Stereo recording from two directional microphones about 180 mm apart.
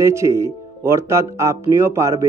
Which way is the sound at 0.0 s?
15° right (ahead or behind).